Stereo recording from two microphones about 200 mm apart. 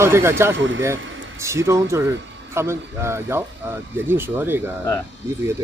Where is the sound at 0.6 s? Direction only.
70° right (ahead or behind).